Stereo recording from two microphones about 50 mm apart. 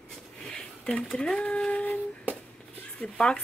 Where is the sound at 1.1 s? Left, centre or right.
Centre.